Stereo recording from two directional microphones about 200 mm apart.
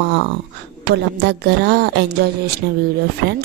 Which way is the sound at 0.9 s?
55° right (ahead or behind).